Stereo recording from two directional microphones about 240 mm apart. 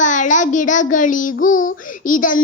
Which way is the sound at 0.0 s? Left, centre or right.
Left.